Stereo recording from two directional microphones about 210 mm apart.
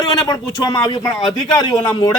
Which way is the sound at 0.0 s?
20° left (ahead or behind).